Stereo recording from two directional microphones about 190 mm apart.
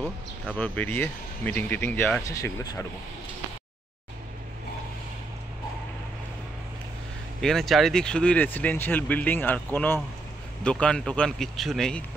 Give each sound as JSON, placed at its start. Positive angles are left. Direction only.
{"t": 0.5, "sound": "speech", "side_deg": 5}
{"t": 2.2, "sound": "speech", "side_deg": 20}
{"t": 7.4, "sound": "speech", "side_deg": 0}